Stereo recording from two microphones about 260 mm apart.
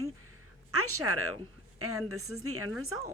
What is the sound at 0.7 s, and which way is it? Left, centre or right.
Speech, right.